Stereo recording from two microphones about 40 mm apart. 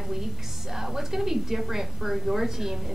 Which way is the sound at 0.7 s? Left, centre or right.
Centre.